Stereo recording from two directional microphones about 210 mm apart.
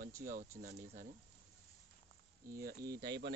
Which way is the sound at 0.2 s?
40° right (ahead or behind).